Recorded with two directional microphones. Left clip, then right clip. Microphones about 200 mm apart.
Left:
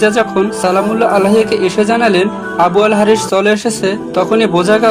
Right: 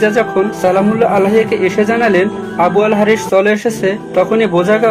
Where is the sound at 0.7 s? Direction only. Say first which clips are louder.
Left 1 dB; 40° left (ahead or behind).